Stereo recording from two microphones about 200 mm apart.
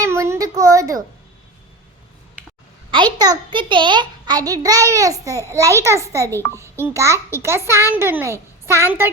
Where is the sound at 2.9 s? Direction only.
20° right (ahead or behind).